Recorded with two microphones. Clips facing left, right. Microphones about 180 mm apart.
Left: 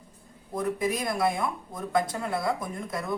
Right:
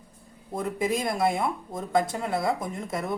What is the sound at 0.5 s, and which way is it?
Speech, 25° right (ahead or behind).